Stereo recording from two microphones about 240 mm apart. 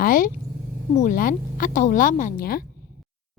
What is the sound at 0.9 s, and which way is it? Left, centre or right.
A woman's voice, left.